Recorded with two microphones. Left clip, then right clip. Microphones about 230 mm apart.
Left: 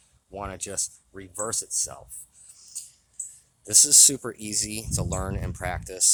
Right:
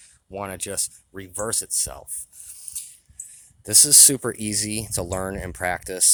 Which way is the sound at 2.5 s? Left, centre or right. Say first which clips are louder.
Right 2 dB; right.